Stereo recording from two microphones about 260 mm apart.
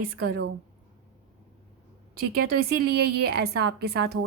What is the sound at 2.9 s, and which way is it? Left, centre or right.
A woman's voice, right.